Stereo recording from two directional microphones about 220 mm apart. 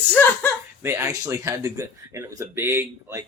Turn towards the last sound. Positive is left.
turn(degrees=-10)  # may be behind; listen again after turning